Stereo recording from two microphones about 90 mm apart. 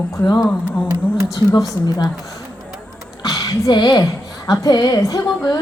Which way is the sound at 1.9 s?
50° left (ahead or behind).